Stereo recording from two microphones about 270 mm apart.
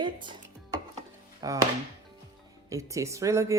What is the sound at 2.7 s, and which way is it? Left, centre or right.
Speech, centre.